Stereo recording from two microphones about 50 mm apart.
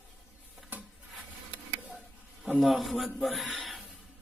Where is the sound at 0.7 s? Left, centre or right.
Right.